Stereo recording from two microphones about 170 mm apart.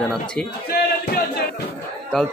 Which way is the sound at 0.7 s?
65° left (ahead or behind).